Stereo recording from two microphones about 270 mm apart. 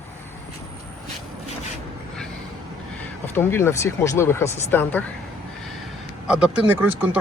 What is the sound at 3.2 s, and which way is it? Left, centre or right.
Speech, centre.